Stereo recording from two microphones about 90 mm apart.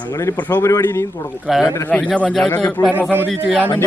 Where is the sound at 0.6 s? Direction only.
35° left (ahead or behind).